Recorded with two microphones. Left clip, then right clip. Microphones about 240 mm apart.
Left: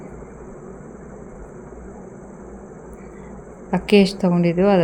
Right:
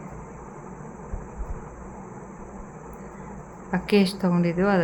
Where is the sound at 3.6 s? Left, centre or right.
Centre.